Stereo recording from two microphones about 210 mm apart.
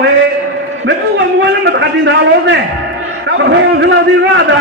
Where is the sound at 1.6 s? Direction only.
60° right (ahead or behind).